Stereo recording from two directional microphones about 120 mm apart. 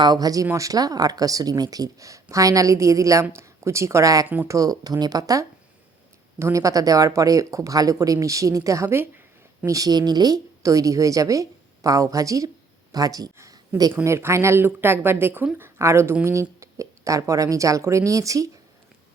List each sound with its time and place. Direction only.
0.0 s speech: 35° right (ahead or behind)
4.3 s speech: 15° right (ahead or behind)
4.5 s speech: 30° right (ahead or behind)